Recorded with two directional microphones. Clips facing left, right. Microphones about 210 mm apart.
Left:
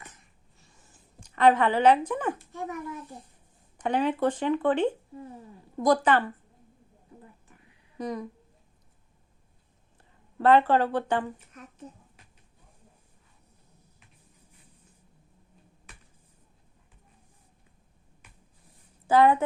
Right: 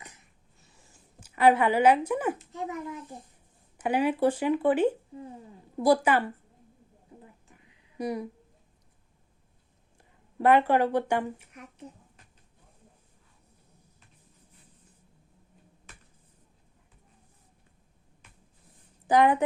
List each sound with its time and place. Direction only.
1.2 s speech: 10° right (ahead or behind)
2.4 s a child's voice: 20° right (ahead or behind)
7.9 s speech: 10° right (ahead or behind)
10.0 s speech: 10° right (ahead or behind)
19.0 s a woman's voice: 15° right (ahead or behind)